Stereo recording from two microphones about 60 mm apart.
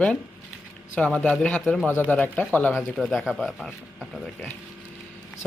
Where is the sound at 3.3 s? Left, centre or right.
Centre.